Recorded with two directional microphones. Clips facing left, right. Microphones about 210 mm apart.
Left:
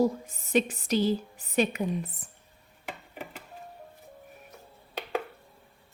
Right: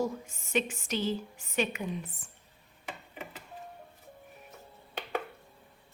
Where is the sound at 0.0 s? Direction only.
35° left (ahead or behind).